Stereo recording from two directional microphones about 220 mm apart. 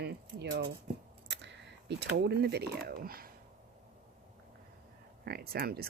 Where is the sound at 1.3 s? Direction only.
55° right (ahead or behind).